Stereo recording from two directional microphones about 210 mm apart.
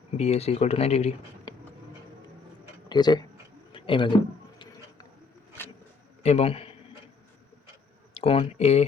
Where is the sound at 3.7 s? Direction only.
25° left (ahead or behind).